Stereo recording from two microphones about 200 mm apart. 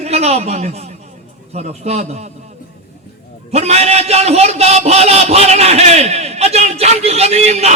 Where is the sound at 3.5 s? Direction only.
30° right (ahead or behind).